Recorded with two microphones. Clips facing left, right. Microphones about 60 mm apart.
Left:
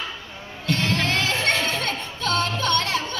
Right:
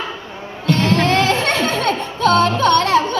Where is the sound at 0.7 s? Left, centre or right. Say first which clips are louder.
Right 8 dB; right.